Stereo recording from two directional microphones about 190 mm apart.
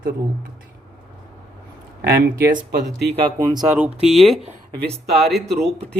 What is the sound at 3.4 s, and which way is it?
Speech, 20° right (ahead or behind).